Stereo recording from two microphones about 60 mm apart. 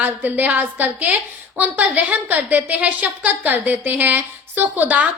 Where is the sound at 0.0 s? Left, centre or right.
Right.